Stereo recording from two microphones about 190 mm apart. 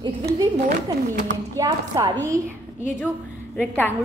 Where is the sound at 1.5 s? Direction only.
15° right (ahead or behind).